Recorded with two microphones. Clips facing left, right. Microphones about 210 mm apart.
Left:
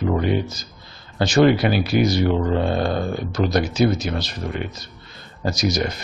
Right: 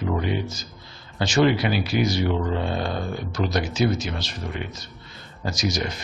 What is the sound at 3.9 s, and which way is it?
Speech, 55° left (ahead or behind).